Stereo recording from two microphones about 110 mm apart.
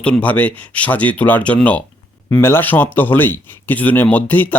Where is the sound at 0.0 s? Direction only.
10° left (ahead or behind).